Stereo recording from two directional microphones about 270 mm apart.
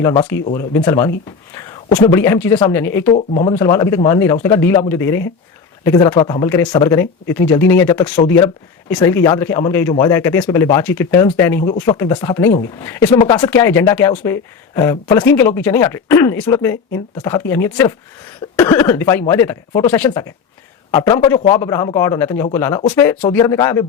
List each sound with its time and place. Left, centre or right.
0.0 s speech: centre
3.1 s speech: left
3.5 s speech: centre